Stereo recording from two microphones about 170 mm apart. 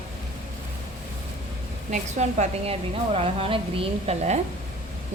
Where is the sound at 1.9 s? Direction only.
45° right (ahead or behind).